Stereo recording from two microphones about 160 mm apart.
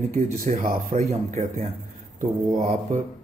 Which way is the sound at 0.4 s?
50° right (ahead or behind).